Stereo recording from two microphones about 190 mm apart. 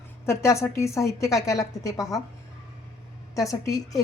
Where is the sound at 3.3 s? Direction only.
15° left (ahead or behind).